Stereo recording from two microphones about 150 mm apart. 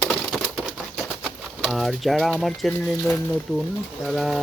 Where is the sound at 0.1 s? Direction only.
Centre (ahead or behind).